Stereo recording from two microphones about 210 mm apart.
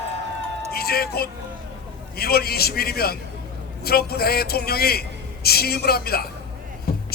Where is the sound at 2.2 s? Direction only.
45° left (ahead or behind).